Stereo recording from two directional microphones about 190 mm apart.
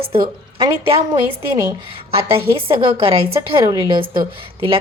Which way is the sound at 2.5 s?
30° right (ahead or behind).